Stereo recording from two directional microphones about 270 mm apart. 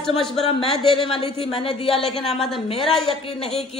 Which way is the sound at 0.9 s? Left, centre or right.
Centre.